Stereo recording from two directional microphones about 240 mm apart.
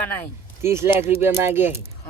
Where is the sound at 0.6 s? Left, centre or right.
Centre.